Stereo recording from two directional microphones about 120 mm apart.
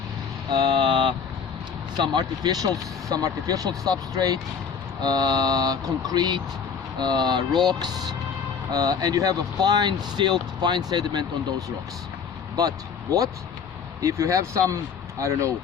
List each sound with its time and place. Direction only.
0.5 s speech: 40° right (ahead or behind)
12.5 s speech: 30° right (ahead or behind)